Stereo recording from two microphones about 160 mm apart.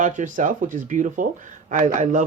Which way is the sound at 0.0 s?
55° right (ahead or behind).